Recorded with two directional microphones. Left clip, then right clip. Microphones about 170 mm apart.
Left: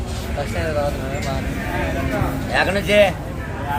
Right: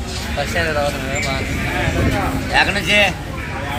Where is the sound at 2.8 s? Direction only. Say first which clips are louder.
Even; 80° left.